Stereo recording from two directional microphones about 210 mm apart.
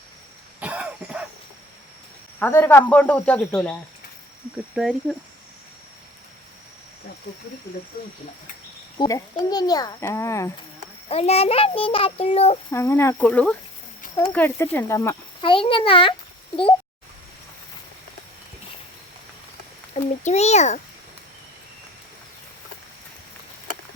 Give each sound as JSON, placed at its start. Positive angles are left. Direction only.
{"t": 0.6, "sound": "cough", "side_deg": -5}
{"t": 2.4, "sound": "a child's voice", "side_deg": 10}
{"t": 7.3, "sound": "speech", "side_deg": 50}
{"t": 9.0, "sound": "a child's voice", "side_deg": 15}
{"t": 11.1, "sound": "a child's voice", "side_deg": 30}
{"t": 12.7, "sound": "a child's voice", "side_deg": 15}
{"t": 19.9, "sound": "a child's voice", "side_deg": 30}